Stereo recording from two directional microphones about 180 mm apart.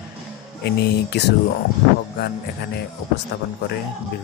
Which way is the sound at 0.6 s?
65° left (ahead or behind).